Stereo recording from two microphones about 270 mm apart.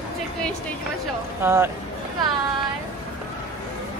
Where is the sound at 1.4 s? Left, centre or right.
Centre.